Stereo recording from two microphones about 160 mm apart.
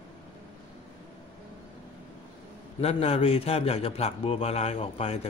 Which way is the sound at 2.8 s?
40° left (ahead or behind).